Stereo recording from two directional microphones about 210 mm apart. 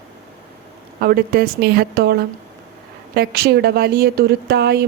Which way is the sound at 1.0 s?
45° right (ahead or behind).